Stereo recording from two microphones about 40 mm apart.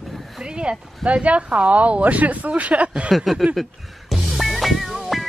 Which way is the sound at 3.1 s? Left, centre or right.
Centre.